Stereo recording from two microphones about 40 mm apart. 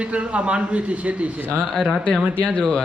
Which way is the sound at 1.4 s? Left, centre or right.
Right.